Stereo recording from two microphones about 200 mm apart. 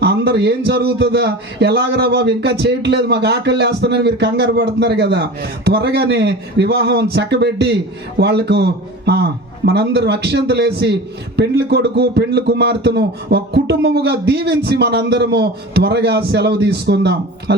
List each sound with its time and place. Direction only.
0.0 s speech: 55° right (ahead or behind)